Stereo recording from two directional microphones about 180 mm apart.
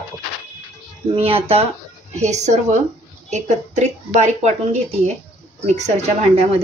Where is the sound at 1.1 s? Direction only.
30° right (ahead or behind).